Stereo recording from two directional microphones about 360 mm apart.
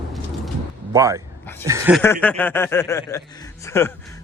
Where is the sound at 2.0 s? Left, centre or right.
Centre.